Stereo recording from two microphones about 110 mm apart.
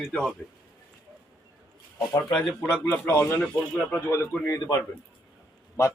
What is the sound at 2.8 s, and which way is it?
Speech, 20° left (ahead or behind).